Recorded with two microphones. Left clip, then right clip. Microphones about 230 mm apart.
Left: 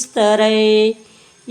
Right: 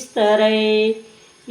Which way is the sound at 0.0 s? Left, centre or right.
Left.